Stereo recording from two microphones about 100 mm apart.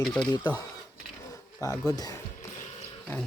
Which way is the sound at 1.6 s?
35° left (ahead or behind).